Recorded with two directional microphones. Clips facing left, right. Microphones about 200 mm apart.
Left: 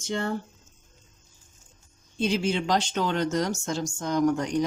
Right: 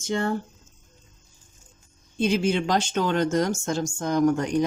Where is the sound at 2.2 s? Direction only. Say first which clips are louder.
Right 3 dB; 50° right (ahead or behind).